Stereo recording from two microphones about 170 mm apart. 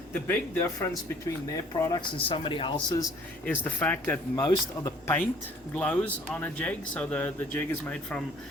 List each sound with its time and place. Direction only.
0.1 s speech: 10° left (ahead or behind)
3.4 s speech: 10° left (ahead or behind)
4.4 s speech: 20° left (ahead or behind)